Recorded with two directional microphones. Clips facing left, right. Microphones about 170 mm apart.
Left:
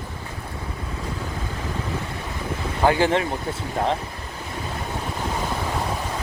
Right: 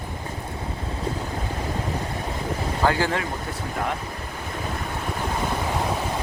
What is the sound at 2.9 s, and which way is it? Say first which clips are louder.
Speech: left 5 dB; 20° left (ahead or behind).